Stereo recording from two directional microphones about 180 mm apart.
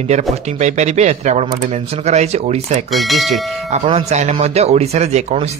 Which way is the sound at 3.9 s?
35° right (ahead or behind).